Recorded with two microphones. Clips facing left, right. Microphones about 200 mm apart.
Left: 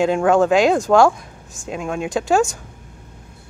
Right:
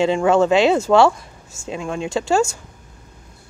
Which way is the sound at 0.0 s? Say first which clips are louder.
Even; centre (ahead or behind).